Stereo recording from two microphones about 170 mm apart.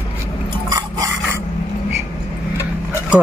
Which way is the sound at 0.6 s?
20° right (ahead or behind).